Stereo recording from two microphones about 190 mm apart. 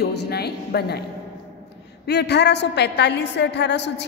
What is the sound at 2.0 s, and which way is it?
A woman's voice, 60° left (ahead or behind).